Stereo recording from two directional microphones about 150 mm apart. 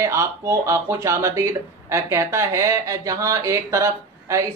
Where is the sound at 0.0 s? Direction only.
20° right (ahead or behind).